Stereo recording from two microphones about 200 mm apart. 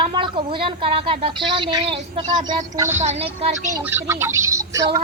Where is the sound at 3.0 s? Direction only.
35° right (ahead or behind).